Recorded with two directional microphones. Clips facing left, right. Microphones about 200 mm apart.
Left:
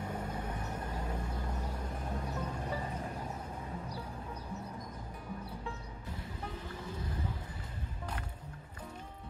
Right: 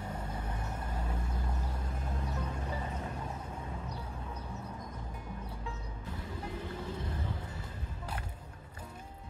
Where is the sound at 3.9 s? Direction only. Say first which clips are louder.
Even; 10° left (ahead or behind).